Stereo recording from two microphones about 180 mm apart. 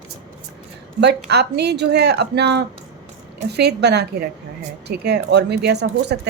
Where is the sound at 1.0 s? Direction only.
65° right (ahead or behind).